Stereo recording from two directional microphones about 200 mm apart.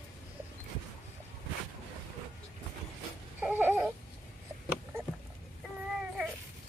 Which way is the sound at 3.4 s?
10° right (ahead or behind).